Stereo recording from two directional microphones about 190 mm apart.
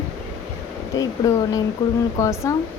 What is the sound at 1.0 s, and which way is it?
Speech, 20° left (ahead or behind).